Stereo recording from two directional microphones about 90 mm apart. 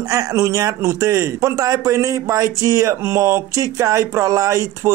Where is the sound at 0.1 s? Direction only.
35° right (ahead or behind).